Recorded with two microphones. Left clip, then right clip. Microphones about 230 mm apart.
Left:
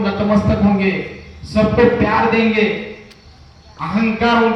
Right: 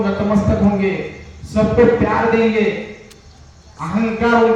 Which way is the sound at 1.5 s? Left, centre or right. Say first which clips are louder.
Even; left.